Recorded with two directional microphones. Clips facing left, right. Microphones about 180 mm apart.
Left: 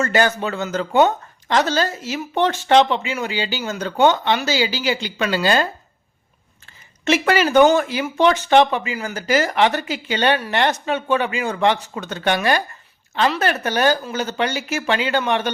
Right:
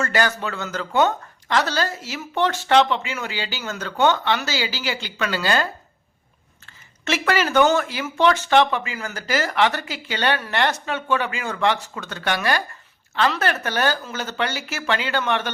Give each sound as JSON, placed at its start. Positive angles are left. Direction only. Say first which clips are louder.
{"t": 0.0, "sound": "speech", "louder": "left 4 dB", "side_deg": 20}
{"t": 7.0, "sound": "speech", "louder": "left 4 dB", "side_deg": 20}